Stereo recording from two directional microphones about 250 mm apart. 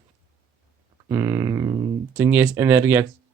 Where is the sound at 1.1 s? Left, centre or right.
Centre.